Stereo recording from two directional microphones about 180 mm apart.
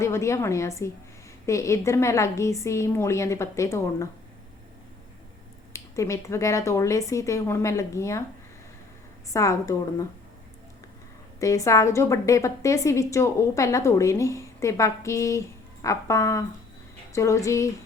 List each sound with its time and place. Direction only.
0.0 s a woman's voice: 15° left (ahead or behind)
5.7 s a woman's voice: 15° left (ahead or behind)
9.3 s a woman's voice: 20° left (ahead or behind)
11.3 s a woman's voice: 20° left (ahead or behind)